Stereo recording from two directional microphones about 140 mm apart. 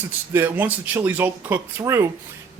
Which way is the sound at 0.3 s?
15° right (ahead or behind).